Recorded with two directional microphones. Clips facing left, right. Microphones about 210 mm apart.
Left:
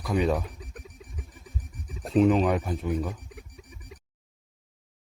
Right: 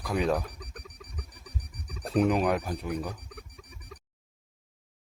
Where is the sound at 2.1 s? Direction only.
5° right (ahead or behind).